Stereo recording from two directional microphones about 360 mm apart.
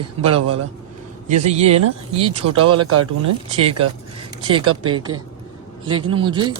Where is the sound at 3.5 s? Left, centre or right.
Centre.